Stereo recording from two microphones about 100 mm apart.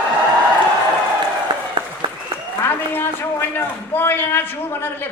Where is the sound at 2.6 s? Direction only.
20° left (ahead or behind).